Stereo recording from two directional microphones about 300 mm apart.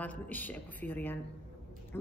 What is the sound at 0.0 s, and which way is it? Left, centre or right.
A woman's voice, centre.